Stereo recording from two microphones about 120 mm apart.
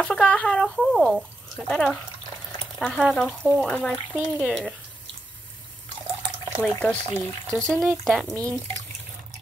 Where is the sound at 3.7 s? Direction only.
15° left (ahead or behind).